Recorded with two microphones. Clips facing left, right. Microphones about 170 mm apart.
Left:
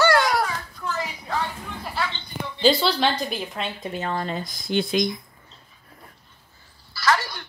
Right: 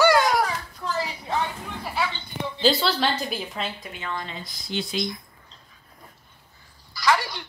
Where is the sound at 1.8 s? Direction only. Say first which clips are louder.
Right 1 dB; 5° right (ahead or behind).